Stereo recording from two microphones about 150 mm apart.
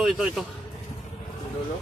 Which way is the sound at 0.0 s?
5° right (ahead or behind).